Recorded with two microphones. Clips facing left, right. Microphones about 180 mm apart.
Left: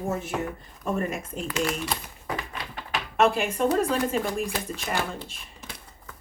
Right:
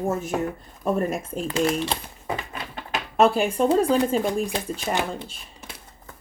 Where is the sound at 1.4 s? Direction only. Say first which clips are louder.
Right 5 dB; 30° right (ahead or behind).